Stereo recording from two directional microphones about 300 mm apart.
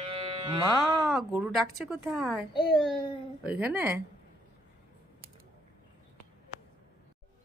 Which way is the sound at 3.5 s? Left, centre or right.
Centre.